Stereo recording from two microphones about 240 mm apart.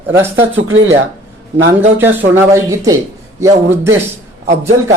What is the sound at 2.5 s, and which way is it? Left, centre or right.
A man's voice, centre.